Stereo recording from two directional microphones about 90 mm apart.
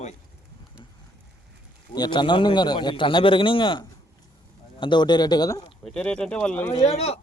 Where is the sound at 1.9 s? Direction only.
55° left (ahead or behind); by 3.9 s 70° left (ahead or behind).